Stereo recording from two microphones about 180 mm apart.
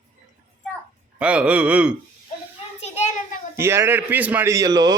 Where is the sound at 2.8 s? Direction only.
35° left (ahead or behind).